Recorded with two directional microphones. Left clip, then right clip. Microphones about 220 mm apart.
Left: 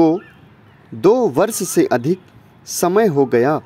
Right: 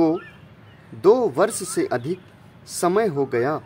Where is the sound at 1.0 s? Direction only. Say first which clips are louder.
Left 3 dB; 25° left (ahead or behind).